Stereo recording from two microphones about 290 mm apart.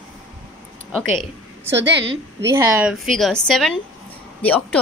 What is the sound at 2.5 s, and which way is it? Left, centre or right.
A woman's voice, centre.